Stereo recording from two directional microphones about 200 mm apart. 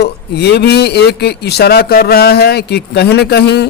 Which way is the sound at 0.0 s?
55° left (ahead or behind).